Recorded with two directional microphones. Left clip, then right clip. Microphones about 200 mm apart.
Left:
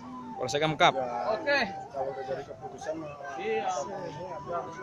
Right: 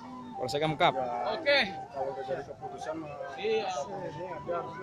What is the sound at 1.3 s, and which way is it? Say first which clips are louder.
Speech: right 1 dB; 25° right (ahead or behind).